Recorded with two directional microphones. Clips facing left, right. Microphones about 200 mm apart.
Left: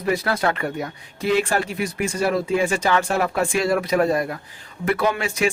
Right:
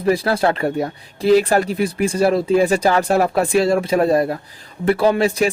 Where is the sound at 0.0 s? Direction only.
30° right (ahead or behind).